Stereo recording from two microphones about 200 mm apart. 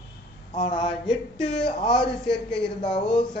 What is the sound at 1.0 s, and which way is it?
Speech, 5° left (ahead or behind).